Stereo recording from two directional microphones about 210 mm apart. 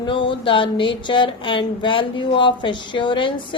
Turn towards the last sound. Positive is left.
turn(degrees=25)  # may be behind; listen again after turning